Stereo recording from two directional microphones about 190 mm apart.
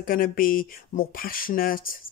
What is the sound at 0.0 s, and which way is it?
Speech, 50° left (ahead or behind).